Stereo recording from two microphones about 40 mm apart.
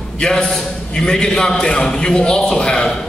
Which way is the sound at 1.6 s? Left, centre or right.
Left.